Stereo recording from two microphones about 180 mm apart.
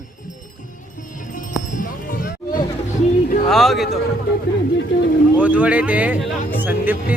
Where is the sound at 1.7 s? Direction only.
55° left (ahead or behind).